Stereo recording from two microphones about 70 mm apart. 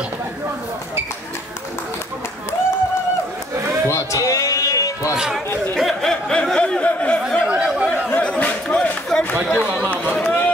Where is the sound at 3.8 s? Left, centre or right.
Left.